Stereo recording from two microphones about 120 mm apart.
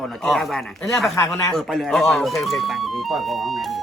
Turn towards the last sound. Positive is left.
turn(degrees=0)  # may be behind; listen again after turning